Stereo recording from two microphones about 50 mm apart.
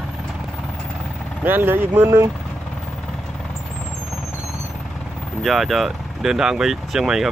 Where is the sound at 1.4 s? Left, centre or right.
Right.